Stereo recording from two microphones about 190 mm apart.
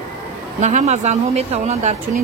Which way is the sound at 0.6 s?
40° right (ahead or behind).